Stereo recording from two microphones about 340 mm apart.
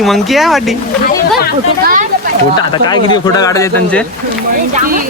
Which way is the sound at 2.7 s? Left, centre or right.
Centre.